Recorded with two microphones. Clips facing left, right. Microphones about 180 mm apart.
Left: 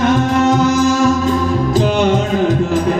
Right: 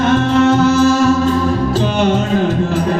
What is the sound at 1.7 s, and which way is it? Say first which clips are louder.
Music: left 1 dB; 15° left (ahead or behind).